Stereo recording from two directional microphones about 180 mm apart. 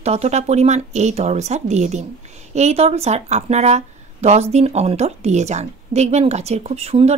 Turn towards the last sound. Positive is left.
turn(degrees=-35)  # may be behind; listen again after turning